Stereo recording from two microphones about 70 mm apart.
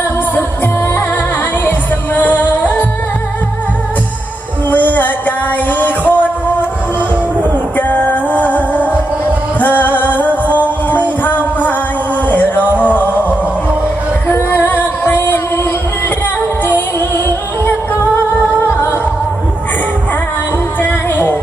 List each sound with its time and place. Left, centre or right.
2.1 s music: left
4.7 s music: left
7.8 s music: left
14.5 s music: left
20.8 s music: left